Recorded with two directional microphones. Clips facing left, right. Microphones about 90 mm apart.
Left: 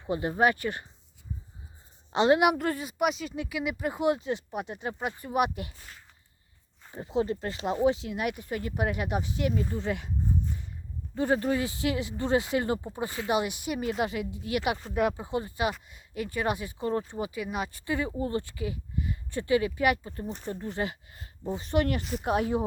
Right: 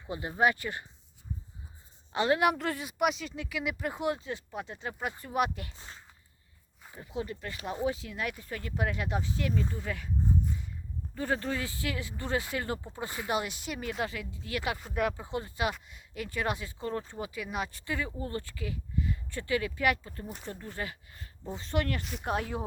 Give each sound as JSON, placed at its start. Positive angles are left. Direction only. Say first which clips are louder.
{"t": 0.1, "sound": "speech", "louder": "left 6 dB", "side_deg": 45}
{"t": 0.7, "sound": "speech", "louder": "left 4 dB", "side_deg": 15}
{"t": 2.1, "sound": "speech", "louder": "left 4 dB", "side_deg": 20}
{"t": 3.3, "sound": "speech", "louder": "left 3 dB", "side_deg": 15}
{"t": 5.7, "sound": "a sound", "louder": "right 1 dB", "side_deg": -25}
{"t": 6.9, "sound": "speech", "louder": "left 8 dB", "side_deg": 30}
{"t": 11.3, "sound": "speech", "louder": "left 5 dB", "side_deg": 15}
{"t": 16.6, "sound": "speech", "louder": "left 5 dB", "side_deg": 15}
{"t": 17.2, "sound": "speech", "louder": "left 3 dB", "side_deg": 5}
{"t": 17.9, "sound": "speech", "louder": "left 6 dB", "side_deg": 20}
{"t": 20.2, "sound": "speech", "louder": "left 5 dB", "side_deg": -5}
{"t": 20.5, "sound": "speech", "louder": "left 7 dB", "side_deg": 20}
{"t": 22.0, "sound": "speech", "louder": "left 5 dB", "side_deg": 0}